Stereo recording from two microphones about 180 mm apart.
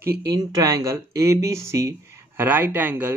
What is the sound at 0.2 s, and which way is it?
Speech, 20° right (ahead or behind).